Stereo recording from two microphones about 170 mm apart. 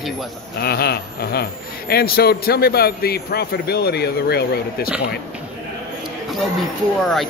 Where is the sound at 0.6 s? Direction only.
70° left (ahead or behind).